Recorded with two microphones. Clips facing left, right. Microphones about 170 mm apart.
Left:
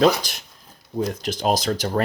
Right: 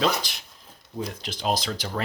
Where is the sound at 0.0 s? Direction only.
45° left (ahead or behind).